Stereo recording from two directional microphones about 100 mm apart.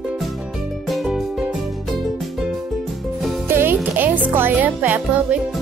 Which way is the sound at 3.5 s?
20° right (ahead or behind).